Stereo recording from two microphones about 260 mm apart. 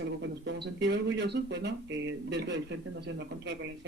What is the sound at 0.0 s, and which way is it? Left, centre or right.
Speech, right.